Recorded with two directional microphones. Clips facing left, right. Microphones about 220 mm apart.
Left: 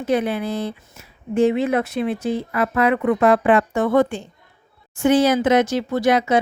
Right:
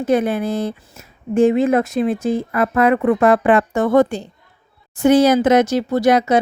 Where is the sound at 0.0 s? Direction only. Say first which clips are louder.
Right 3 dB; 45° right (ahead or behind).